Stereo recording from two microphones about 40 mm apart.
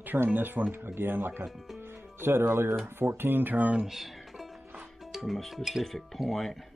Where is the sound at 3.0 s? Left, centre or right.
Right.